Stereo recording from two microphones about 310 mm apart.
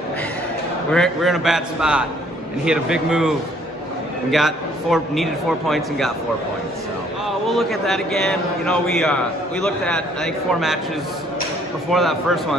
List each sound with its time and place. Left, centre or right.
0.9 s a man's voice: centre
7.4 s a man's voice: centre
11.9 s a man's voice: centre